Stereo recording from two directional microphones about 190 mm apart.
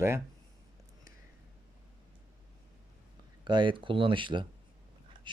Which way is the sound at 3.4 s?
25° right (ahead or behind).